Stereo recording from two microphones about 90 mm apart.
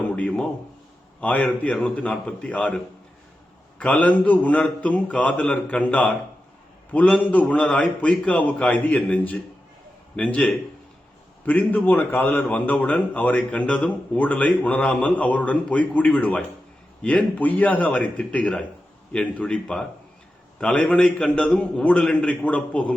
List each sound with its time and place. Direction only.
0.2 s a sound: 15° left (ahead or behind)
1.2 s a man's voice: 15° left (ahead or behind)
3.8 s a man's voice: 15° left (ahead or behind)